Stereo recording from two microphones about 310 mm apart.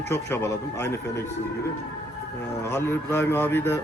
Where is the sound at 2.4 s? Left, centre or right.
Centre.